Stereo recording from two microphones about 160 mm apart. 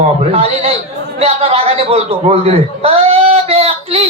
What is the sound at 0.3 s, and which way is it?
Speech, 40° right (ahead or behind).